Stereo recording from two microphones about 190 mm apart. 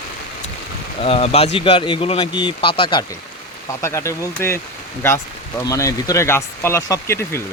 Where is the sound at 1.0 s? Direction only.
30° left (ahead or behind).